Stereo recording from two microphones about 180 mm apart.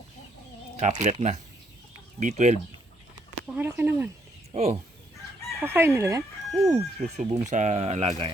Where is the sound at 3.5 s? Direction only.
10° right (ahead or behind).